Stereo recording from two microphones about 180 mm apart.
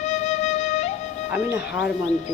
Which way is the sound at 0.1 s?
40° left (ahead or behind).